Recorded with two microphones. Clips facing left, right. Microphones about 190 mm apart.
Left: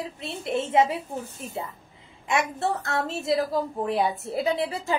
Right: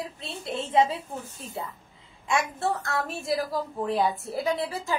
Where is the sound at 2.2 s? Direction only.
20° left (ahead or behind).